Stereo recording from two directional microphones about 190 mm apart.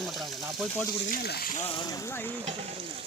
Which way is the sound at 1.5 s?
30° left (ahead or behind).